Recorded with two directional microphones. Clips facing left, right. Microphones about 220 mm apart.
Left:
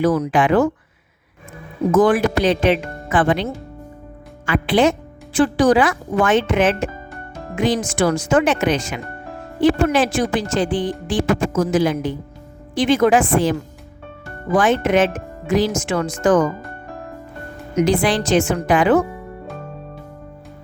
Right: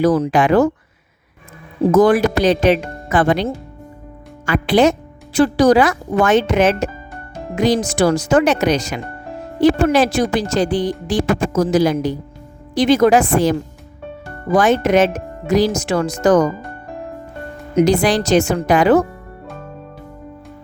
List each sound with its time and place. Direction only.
0.0 s speech: 35° right (ahead or behind)
1.8 s speech: 40° right (ahead or behind)
17.7 s speech: 40° right (ahead or behind)